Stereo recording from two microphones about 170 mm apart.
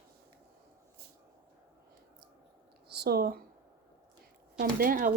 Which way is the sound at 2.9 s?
70° right (ahead or behind).